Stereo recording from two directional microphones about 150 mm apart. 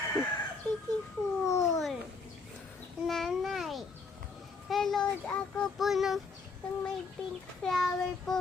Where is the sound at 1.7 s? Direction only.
Centre (ahead or behind).